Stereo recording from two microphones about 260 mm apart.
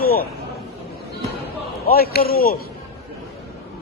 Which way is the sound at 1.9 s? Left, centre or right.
Left.